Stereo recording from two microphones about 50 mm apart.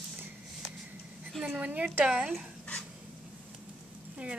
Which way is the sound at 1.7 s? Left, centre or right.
Right.